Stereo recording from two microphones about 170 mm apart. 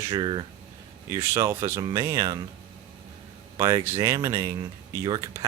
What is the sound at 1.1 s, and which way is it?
Speech, 15° right (ahead or behind).